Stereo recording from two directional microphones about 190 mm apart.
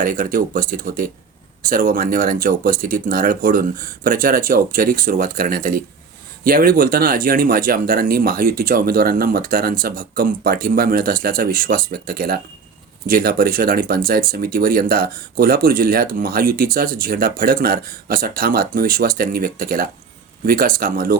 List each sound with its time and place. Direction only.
0.0 s speech: 50° right (ahead or behind)